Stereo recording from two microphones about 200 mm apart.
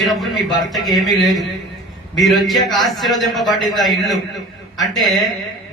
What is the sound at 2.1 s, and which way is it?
A man's voice, centre (ahead or behind).